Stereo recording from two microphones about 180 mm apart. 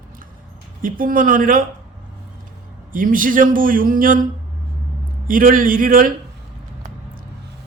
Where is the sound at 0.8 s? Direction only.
50° right (ahead or behind).